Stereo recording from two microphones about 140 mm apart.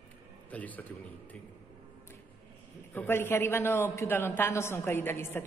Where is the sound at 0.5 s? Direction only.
10° left (ahead or behind).